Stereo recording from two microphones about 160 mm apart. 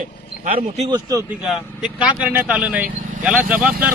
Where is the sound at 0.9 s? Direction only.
20° right (ahead or behind).